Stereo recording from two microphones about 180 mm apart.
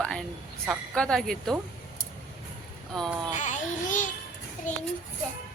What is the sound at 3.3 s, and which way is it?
Child singing, 45° left (ahead or behind).